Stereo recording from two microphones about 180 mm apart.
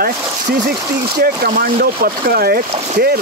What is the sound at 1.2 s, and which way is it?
Speech, 55° right (ahead or behind).